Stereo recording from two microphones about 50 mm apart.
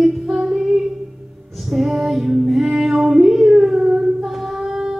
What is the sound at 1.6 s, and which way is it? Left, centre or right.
Female singing, centre.